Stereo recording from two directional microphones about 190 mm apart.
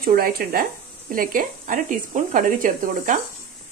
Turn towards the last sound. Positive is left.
turn(degrees=-45)  # may be behind; listen again after turning